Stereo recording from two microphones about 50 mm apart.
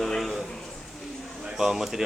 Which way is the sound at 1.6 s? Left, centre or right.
Centre.